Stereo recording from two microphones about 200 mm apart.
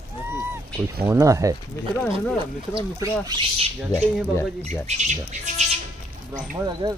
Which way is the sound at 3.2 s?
20° right (ahead or behind).